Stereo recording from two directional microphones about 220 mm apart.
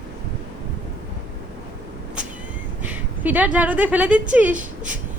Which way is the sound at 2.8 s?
10° right (ahead or behind).